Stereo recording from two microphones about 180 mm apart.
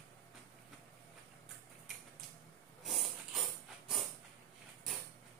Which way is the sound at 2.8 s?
Centre (ahead or behind).